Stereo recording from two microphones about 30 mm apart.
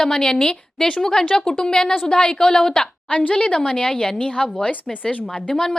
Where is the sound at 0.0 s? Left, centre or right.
Left.